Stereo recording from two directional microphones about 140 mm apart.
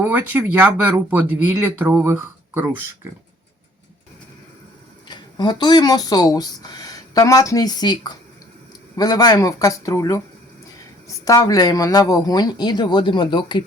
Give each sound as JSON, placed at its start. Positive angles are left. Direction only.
{"t": 0.0, "sound": "speech", "side_deg": -10}
{"t": 5.0, "sound": "speech", "side_deg": 30}
{"t": 11.3, "sound": "speech", "side_deg": 25}